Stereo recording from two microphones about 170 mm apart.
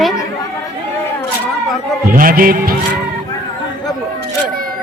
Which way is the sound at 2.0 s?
55° right (ahead or behind).